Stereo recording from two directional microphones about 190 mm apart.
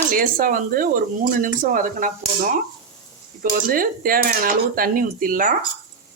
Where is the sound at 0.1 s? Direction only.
45° right (ahead or behind).